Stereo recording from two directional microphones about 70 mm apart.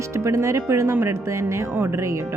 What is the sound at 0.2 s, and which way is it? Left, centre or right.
A woman's voice, right.